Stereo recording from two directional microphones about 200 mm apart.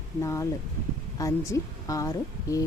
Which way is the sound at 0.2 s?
15° left (ahead or behind).